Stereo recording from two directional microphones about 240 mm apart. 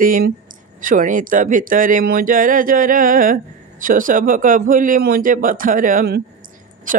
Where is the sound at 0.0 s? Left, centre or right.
Right.